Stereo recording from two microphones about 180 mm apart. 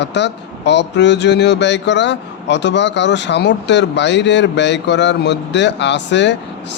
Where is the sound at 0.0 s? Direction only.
75° left (ahead or behind).